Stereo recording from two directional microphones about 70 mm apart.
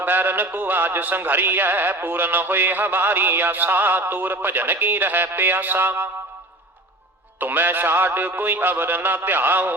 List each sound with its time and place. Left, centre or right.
0.0 s music: right
7.3 s music: right